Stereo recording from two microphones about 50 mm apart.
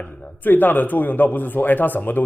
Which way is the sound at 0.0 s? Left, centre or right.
Left.